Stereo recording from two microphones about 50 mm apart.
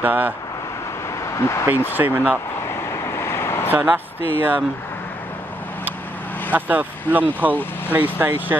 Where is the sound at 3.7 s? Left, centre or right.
Right.